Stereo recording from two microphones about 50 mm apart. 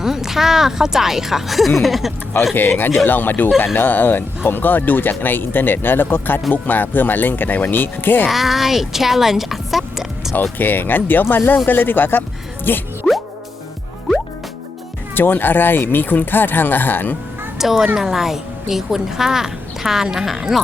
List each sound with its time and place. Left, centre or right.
0.0 s speech: centre
2.6 s speech: left
8.3 s speech: centre
10.6 s speech: left
15.1 s speech: left
17.6 s speech: centre